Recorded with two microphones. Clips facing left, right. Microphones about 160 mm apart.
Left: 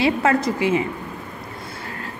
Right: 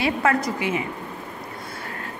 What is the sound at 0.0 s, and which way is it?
Speech, 25° left (ahead or behind).